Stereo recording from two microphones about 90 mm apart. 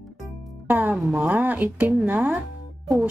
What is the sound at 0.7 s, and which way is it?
A woman's voice, 20° right (ahead or behind).